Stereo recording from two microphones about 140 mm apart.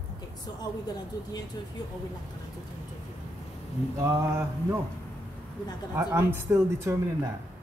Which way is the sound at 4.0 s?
20° right (ahead or behind).